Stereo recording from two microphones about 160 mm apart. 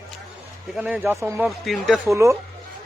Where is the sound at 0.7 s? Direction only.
5° right (ahead or behind).